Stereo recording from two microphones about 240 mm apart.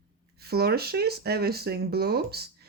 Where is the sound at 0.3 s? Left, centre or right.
Right.